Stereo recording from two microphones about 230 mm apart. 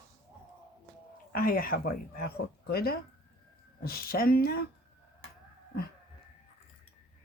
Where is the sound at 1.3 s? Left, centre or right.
Left.